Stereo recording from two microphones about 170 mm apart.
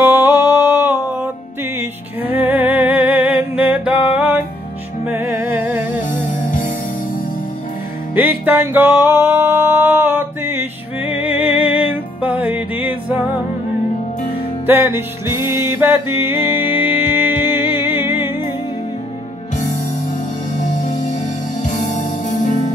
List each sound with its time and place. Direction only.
0.0 s music: 15° right (ahead or behind)
8.1 s music: 10° right (ahead or behind)
14.7 s music: 10° right (ahead or behind)
20.5 s music: 45° left (ahead or behind)